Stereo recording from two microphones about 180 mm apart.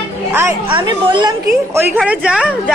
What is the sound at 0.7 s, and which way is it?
A woman's voice, 25° right (ahead or behind).